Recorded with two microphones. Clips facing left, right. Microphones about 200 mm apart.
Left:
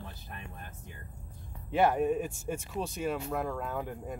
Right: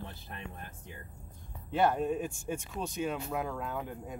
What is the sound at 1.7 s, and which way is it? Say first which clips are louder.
Speech: left 2 dB; 10° left (ahead or behind).